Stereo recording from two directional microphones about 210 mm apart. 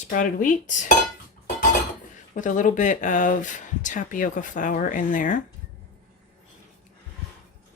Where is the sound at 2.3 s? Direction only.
35° left (ahead or behind).